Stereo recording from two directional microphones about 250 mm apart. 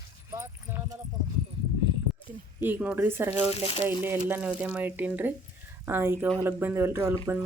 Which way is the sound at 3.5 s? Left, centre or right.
Left.